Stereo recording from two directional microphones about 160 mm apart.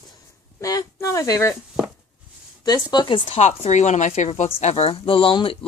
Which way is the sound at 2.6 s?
25° left (ahead or behind).